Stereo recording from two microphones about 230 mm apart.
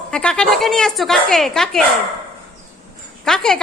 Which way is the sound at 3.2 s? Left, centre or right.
Centre.